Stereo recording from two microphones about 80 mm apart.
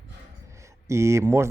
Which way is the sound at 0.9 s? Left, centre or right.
Right.